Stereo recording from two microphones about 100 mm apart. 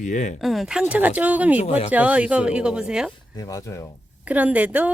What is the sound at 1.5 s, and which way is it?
Speech, 90° left.